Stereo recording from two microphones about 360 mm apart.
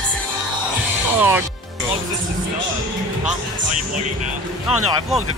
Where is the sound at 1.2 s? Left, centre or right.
Centre.